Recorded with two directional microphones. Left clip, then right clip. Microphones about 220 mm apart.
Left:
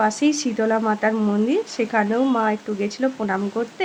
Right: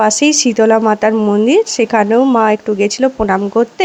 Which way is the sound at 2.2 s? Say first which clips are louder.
Right 10 dB; 20° right (ahead or behind).